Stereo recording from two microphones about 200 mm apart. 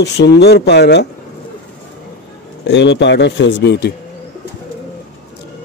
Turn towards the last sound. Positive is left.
turn(degrees=55)  # may be behind; listen again after turning